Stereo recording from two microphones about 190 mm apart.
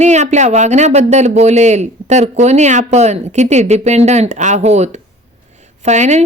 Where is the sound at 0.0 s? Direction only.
35° right (ahead or behind).